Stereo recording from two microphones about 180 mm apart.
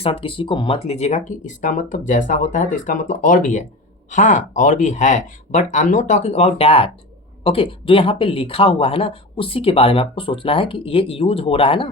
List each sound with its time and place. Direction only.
0.0 s speech: 30° left (ahead or behind)